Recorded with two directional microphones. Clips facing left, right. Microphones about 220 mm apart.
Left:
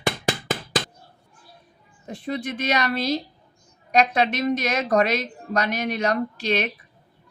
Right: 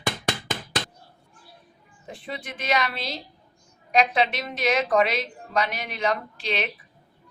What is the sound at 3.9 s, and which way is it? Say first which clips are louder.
A woman's voice: left 2 dB; 45° left (ahead or behind).